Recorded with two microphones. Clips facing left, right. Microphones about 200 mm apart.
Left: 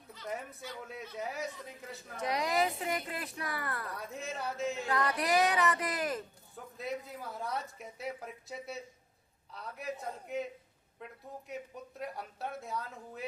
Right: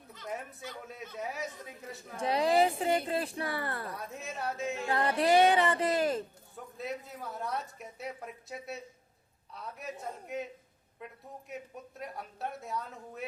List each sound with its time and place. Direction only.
1.2 s a woman's voice: centre (ahead or behind)
2.1 s a woman's voice: 30° right (ahead or behind)
3.9 s a woman's voice: centre (ahead or behind)
4.9 s a woman's voice: 30° right (ahead or behind)
6.7 s a woman's voice: centre (ahead or behind)
11.4 s a woman's voice: centre (ahead or behind)